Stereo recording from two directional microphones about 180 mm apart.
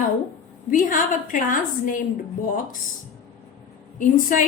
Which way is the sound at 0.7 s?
50° left (ahead or behind).